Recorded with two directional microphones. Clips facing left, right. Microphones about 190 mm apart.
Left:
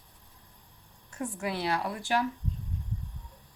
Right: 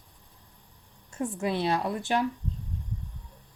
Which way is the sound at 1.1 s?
25° right (ahead or behind).